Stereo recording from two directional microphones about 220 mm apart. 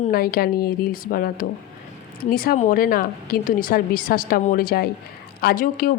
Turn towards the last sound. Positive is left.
turn(degrees=40)  # may be behind; listen again after turning